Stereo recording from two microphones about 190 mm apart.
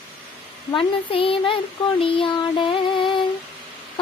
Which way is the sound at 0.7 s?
30° left (ahead or behind).